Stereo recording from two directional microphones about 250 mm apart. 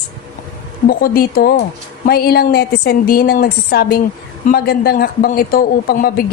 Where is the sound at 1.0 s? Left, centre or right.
Left.